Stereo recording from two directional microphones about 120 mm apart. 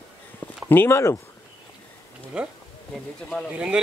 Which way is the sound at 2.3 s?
5° right (ahead or behind).